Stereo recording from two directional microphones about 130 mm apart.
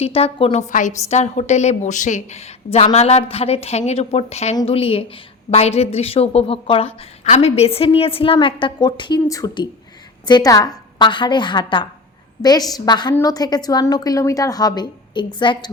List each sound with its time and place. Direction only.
0.0 s a woman's voice: 50° left (ahead or behind)
0.7 s a woman's voice: 70° left (ahead or behind); by 15.7 s 35° left (ahead or behind)